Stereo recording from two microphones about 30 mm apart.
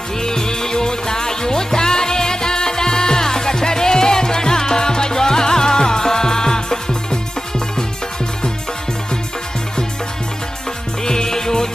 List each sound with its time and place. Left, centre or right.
0.2 s music: left
11.0 s music: left